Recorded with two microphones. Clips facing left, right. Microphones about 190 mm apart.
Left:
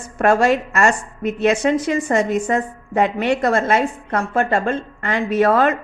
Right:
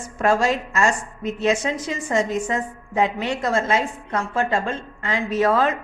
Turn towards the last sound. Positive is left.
turn(degrees=60)  # may be behind; listen again after turning